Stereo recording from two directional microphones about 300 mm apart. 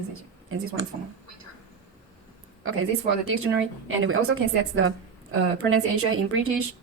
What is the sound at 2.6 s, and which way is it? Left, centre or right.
Speech, right.